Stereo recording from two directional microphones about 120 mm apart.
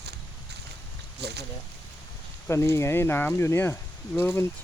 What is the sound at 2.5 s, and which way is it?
Speech, 25° left (ahead or behind).